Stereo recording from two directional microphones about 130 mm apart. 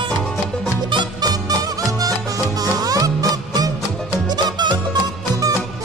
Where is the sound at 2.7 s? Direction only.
30° right (ahead or behind).